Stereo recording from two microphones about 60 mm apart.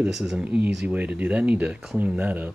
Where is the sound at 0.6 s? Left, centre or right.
Right.